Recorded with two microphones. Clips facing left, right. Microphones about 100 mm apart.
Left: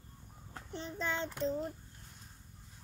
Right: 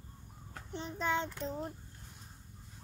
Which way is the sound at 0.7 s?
15° right (ahead or behind).